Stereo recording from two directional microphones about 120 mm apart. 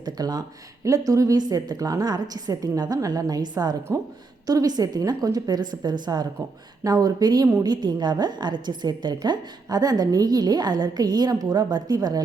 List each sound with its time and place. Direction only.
0.0 s a woman's voice: 30° right (ahead or behind)